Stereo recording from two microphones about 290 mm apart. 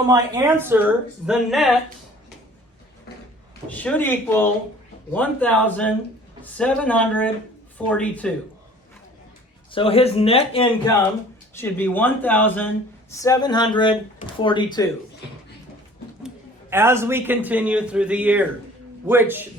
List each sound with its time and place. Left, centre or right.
0.1 s speech: centre
3.7 s speech: centre
9.7 s speech: centre
11.5 s speech: centre
16.2 s a man's voice: centre